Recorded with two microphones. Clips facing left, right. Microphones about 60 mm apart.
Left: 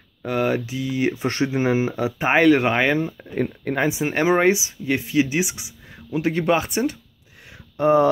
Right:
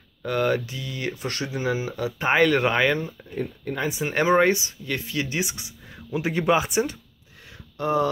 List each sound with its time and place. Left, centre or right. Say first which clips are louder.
0.2 s speech: left 1 dB; centre; by 2.1 s left
2.1 s speech: left 3 dB; centre
3.3 s speech: left 5 dB; left
4.0 s speech: even; centre
7.7 s speech: left 7 dB; left